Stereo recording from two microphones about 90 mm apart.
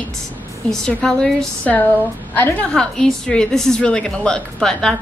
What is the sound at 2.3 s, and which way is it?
Speech, 25° left (ahead or behind).